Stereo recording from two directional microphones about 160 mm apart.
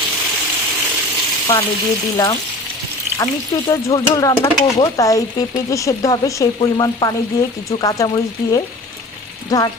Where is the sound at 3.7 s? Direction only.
20° left (ahead or behind).